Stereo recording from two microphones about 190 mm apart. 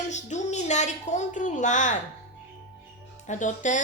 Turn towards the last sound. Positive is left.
turn(degrees=40)  # may be behind; listen again after turning